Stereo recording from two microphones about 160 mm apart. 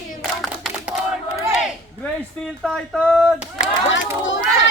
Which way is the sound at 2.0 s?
Centre (ahead or behind).